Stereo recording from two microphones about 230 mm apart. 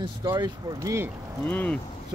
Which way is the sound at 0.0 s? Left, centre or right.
Centre.